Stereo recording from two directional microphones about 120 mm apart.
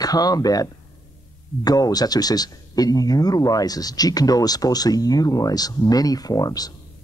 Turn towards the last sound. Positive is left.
turn(degrees=30)  # may be behind; listen again after turning